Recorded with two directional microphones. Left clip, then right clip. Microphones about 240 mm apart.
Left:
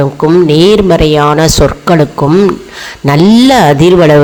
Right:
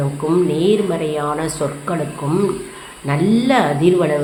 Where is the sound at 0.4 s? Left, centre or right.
Left.